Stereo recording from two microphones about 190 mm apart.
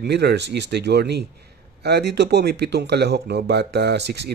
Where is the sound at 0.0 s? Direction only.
60° right (ahead or behind).